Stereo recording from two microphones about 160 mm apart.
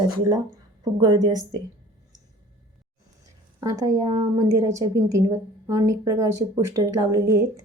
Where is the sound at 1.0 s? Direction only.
25° right (ahead or behind).